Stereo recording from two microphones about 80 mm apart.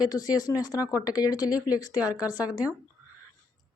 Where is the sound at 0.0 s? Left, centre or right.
Left.